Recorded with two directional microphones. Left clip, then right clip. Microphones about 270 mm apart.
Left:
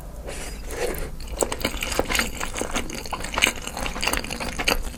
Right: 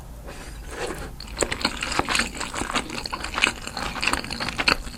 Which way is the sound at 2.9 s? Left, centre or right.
Centre.